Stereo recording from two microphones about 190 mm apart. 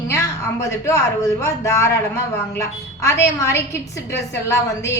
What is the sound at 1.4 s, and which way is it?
Speech, 15° left (ahead or behind).